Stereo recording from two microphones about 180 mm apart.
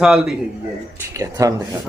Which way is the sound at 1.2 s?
20° right (ahead or behind).